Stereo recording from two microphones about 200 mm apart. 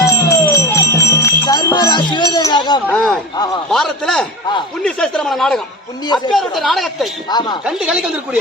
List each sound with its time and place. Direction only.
0.1 s jingle bell: 15° left (ahead or behind)
1.2 s music: 20° left (ahead or behind)
2.8 s a sound: 5° left (ahead or behind)
3.3 s a sound: 20° left (ahead or behind)
3.7 s a man's voice: centre (ahead or behind)
7.3 s speech: 20° left (ahead or behind)
7.6 s speech: 5° right (ahead or behind)